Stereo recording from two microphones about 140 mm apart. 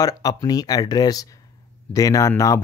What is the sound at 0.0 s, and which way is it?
Speech, 25° left (ahead or behind).